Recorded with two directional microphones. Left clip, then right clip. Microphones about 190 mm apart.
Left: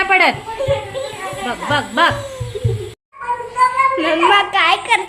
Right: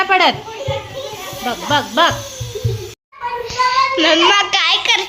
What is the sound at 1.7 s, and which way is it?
Speech, 20° right (ahead or behind).